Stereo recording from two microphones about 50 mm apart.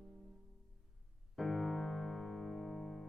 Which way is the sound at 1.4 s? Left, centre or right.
Centre.